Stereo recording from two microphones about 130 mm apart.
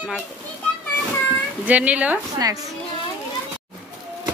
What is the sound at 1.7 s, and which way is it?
Speech, 10° right (ahead or behind).